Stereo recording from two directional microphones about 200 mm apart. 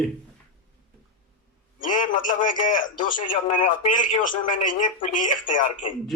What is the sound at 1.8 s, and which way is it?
A man's voice, 40° left (ahead or behind).